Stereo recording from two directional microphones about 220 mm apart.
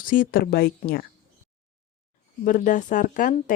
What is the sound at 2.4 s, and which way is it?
Speech, 35° left (ahead or behind).